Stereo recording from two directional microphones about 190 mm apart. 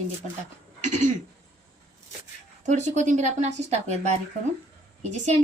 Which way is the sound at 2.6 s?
40° right (ahead or behind).